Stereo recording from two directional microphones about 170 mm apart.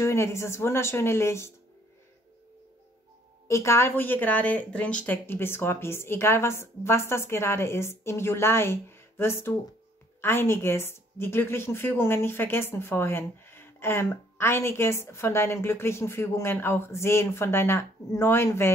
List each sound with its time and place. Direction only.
0.0 s a woman's voice: 15° left (ahead or behind)
3.4 s a woman's voice: 15° left (ahead or behind)